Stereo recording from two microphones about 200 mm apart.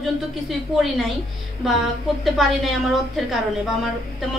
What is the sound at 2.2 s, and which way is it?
Speech, centre (ahead or behind).